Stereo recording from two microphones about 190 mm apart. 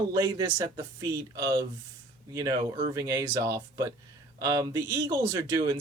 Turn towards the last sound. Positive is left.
turn(degrees=-20)  # may be behind; listen again after turning